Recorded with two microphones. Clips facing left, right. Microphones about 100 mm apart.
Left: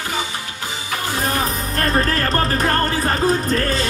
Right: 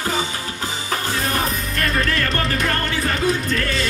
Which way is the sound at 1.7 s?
35° left (ahead or behind).